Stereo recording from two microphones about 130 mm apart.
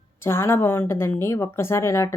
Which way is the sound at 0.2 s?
20° left (ahead or behind).